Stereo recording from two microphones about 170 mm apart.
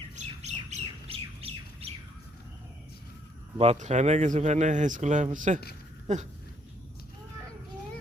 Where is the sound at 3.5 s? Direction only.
35° right (ahead or behind).